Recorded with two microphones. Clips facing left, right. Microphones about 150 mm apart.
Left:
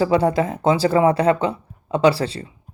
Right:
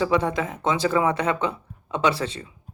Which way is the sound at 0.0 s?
35° left (ahead or behind).